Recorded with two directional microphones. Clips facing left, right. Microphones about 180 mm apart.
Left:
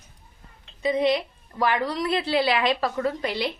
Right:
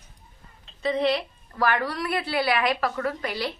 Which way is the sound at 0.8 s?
15° left (ahead or behind).